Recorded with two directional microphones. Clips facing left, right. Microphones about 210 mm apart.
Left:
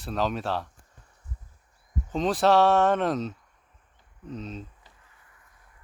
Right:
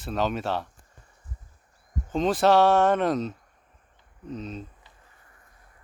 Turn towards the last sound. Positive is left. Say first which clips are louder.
# right 1 dB
turn(degrees=45)  # may be behind; listen again after turning